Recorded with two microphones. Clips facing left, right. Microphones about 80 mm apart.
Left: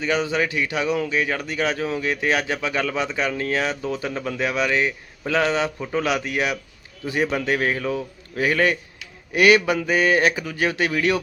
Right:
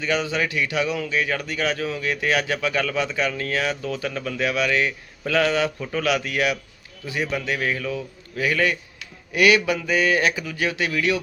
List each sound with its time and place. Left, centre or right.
0.0 s a man's voice: left
7.0 s speech: left